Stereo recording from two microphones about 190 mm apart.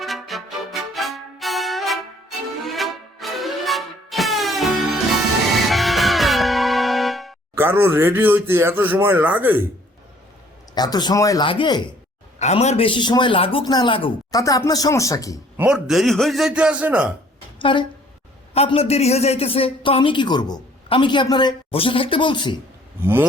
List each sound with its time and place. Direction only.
0.0 s music: centre (ahead or behind)
7.5 s speech: 10° right (ahead or behind)
10.8 s a man's voice: 20° left (ahead or behind)
15.5 s a man's voice: 5° right (ahead or behind)
17.6 s a woman's voice: 25° left (ahead or behind)